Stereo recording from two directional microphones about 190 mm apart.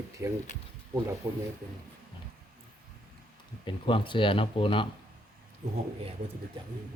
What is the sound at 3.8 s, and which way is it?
Speech, 25° left (ahead or behind).